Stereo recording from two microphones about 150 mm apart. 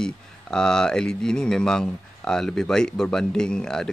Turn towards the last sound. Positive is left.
turn(degrees=5)  # may be behind; listen again after turning